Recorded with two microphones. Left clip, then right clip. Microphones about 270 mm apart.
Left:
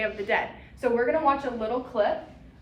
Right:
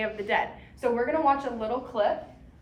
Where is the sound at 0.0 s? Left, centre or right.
Right.